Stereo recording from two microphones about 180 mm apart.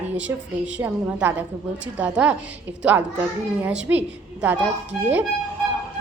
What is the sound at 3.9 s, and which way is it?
Speech, 10° right (ahead or behind).